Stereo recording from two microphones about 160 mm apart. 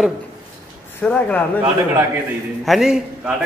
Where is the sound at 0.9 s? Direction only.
10° left (ahead or behind).